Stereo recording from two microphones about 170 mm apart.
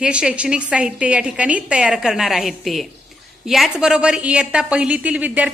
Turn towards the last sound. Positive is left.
turn(degrees=-10)  # may be behind; listen again after turning